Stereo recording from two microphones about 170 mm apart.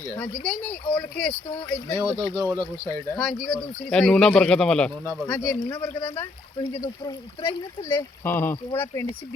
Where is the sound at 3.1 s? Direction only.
Centre (ahead or behind).